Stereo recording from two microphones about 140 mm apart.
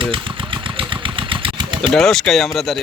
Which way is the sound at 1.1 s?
40° right (ahead or behind).